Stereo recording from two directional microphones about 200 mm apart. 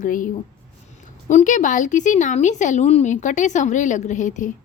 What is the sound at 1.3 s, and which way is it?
A woman's voice, 35° left (ahead or behind).